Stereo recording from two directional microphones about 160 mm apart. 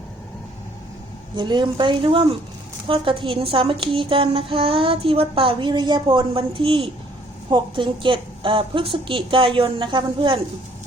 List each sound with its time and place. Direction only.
1.4 s a woman's voice: 30° right (ahead or behind)